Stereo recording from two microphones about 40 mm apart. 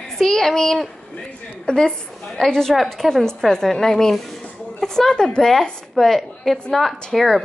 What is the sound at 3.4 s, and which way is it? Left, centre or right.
A woman's voice, centre.